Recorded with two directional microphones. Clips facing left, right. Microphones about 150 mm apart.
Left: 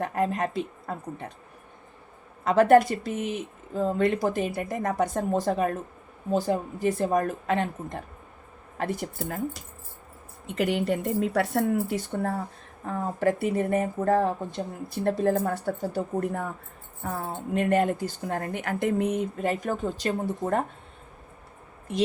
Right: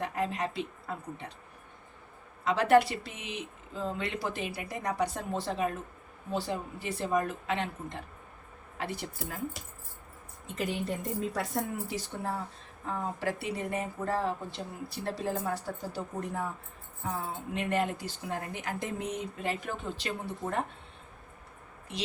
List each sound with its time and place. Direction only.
0.0 s speech: 45° left (ahead or behind)
2.4 s speech: 50° left (ahead or behind)
10.4 s speech: 65° left (ahead or behind); by 20.7 s 45° left (ahead or behind)
21.9 s speech: 50° left (ahead or behind)